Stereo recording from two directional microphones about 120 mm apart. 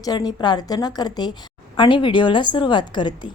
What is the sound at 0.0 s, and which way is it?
A woman's voice, 30° left (ahead or behind).